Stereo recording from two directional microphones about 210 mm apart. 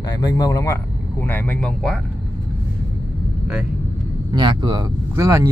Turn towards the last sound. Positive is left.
turn(degrees=-15)  # may be behind; listen again after turning